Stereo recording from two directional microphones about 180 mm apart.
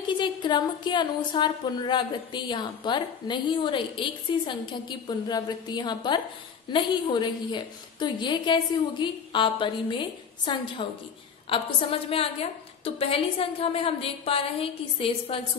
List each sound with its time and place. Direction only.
0.0 s a woman's voice: 25° left (ahead or behind)